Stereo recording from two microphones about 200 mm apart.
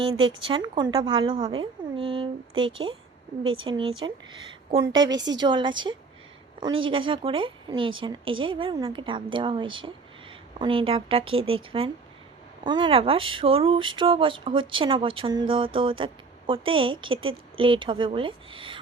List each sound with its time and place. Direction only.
0.2 s speech: 25° right (ahead or behind)